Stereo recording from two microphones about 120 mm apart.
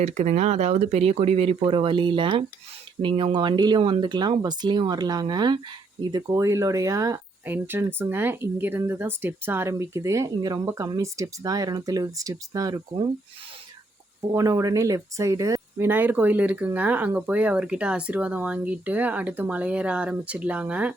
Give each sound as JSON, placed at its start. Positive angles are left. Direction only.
{"t": 0.0, "sound": "speech", "side_deg": -70}
{"t": 7.4, "sound": "speech", "side_deg": -15}
{"t": 14.3, "sound": "speech", "side_deg": -25}
{"t": 15.9, "sound": "speech", "side_deg": -15}